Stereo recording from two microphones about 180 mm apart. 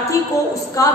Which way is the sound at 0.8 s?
20° left (ahead or behind).